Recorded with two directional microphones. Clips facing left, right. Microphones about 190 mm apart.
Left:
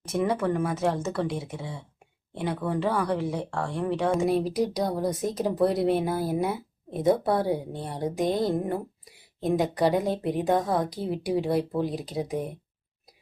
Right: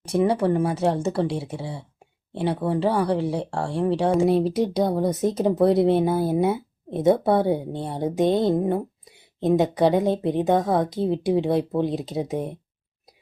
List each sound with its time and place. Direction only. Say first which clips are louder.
0.1 s speech: right 5 dB; 30° right (ahead or behind)